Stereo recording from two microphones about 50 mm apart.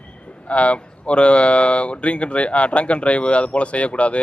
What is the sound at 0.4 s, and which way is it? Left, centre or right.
Speech, left.